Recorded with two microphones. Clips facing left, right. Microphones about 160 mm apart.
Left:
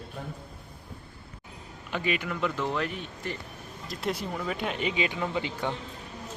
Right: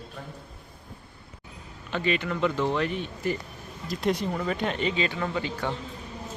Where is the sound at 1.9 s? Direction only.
10° left (ahead or behind).